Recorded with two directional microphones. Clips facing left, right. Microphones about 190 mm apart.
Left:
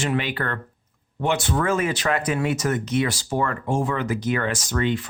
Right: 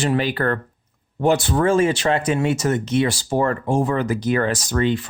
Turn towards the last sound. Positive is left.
turn(degrees=-30)  # may be behind; listen again after turning